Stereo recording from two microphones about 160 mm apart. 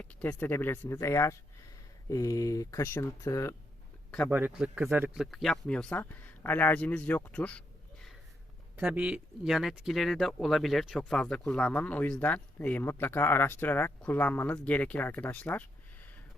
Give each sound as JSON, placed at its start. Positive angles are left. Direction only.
{"t": 0.0, "sound": "speech", "side_deg": 10}
{"t": 4.3, "sound": "speech", "side_deg": -10}
{"t": 8.7, "sound": "speech", "side_deg": -10}